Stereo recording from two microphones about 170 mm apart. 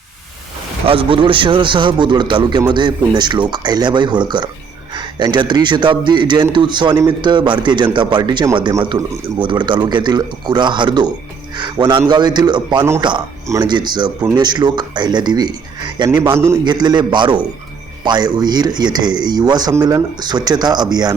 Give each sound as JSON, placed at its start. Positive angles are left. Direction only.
{"t": 0.9, "sound": "a man's voice", "side_deg": -30}